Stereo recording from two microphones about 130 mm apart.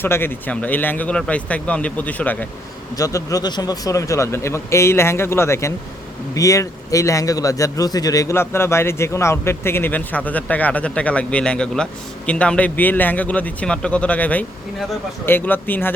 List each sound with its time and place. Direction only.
0.0 s a man's voice: 15° left (ahead or behind)
2.9 s a man's voice: 25° left (ahead or behind)